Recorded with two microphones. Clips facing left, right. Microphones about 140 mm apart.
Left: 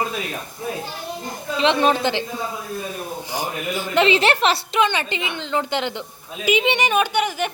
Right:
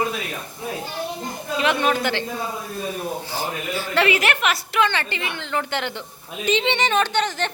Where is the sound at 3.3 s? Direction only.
15° left (ahead or behind).